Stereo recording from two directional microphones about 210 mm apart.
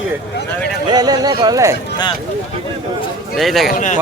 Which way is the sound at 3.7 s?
35° left (ahead or behind).